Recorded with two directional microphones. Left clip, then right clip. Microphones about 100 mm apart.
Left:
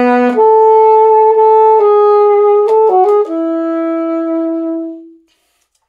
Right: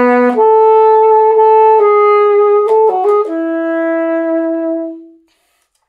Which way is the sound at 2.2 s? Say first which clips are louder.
Left 1 dB; 20° right (ahead or behind).